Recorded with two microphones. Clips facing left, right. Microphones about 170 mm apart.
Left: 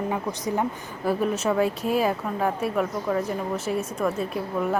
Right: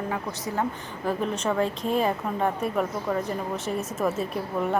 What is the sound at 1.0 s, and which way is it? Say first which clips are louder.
A woman's voice: left 3 dB; 5° left (ahead or behind).